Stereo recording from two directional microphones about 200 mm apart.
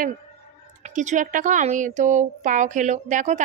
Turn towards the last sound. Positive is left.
turn(degrees=-40)  # may be behind; listen again after turning